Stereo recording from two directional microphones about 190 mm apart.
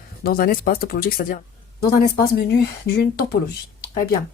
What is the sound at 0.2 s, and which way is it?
Speech, 50° left (ahead or behind).